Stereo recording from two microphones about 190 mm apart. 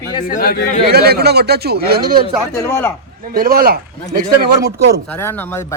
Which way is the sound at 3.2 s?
50° right (ahead or behind).